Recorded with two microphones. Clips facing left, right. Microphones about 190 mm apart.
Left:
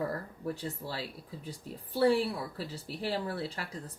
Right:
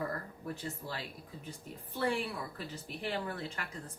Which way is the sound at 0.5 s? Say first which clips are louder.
Left 3 dB; 35° left (ahead or behind).